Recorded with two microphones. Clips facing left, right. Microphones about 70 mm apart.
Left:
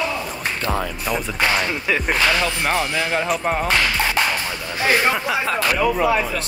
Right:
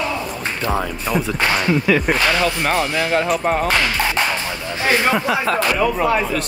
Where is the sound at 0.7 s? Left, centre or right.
Centre.